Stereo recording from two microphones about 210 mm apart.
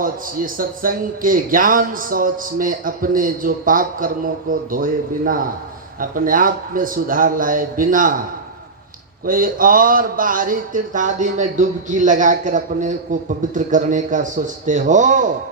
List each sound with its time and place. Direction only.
0.0 s a man's voice: 40° right (ahead or behind)
9.2 s a man's voice: 40° right (ahead or behind)